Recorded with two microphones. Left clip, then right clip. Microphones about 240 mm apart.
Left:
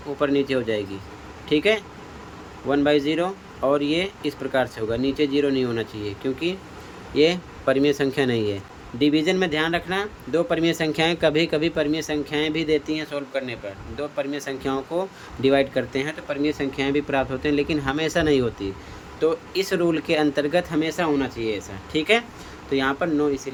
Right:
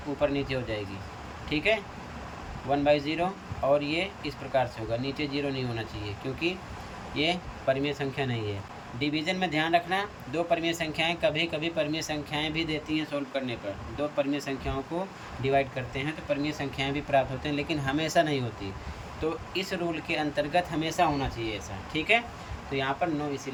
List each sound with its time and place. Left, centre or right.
0.2 s speech: centre